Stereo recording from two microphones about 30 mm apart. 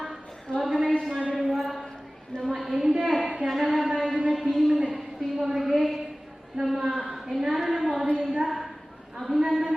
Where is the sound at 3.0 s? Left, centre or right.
Centre.